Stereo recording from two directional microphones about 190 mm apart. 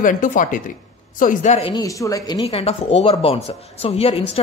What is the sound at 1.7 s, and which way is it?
Speech, 15° left (ahead or behind).